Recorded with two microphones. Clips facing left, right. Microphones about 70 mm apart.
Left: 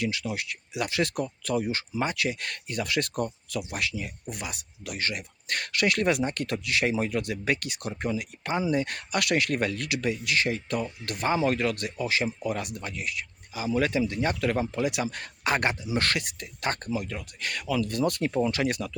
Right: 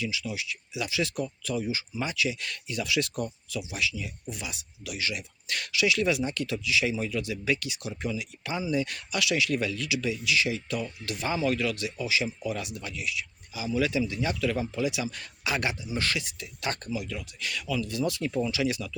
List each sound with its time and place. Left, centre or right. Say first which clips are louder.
0.0 s speech: left 3 dB; left